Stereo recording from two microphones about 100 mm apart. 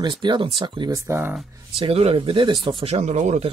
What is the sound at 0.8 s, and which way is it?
Speech, 30° right (ahead or behind).